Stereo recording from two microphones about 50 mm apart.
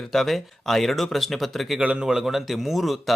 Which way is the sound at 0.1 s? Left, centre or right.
Centre.